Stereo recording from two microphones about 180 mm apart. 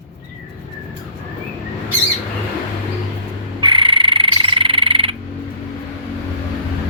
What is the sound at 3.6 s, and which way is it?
Frog, 30° right (ahead or behind).